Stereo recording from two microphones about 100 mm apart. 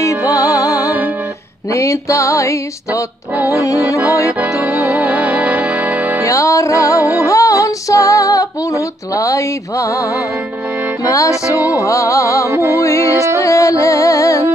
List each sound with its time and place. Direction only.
0.0 s music: 35° left (ahead or behind)
1.7 s female singing: 30° left (ahead or behind)
4.4 s music: 15° right (ahead or behind)
6.2 s female singing: 35° left (ahead or behind)
11.1 s female singing: 30° left (ahead or behind)
12.4 s music: 25° right (ahead or behind)
12.7 s female singing: 30° left (ahead or behind)
13.4 s music: 30° left (ahead or behind)